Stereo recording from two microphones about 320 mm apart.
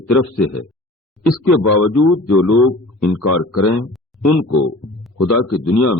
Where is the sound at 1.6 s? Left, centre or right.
Left.